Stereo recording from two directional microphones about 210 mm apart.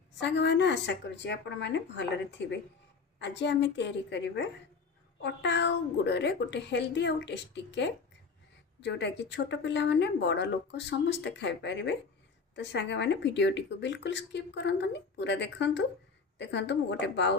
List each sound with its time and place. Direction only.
0.2 s speech: 55° left (ahead or behind)
3.2 s speech: 55° left (ahead or behind)